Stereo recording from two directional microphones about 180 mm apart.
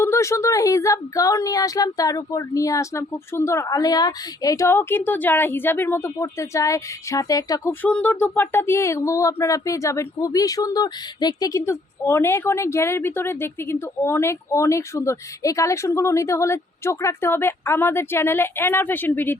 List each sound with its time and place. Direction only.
0.0 s speech: 15° left (ahead or behind)